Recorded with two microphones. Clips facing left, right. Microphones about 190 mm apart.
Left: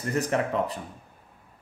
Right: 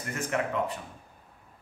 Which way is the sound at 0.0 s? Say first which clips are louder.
Left 5 dB; 35° left (ahead or behind).